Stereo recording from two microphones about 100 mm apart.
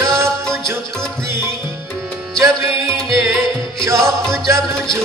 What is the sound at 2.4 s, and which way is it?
Music, 30° right (ahead or behind).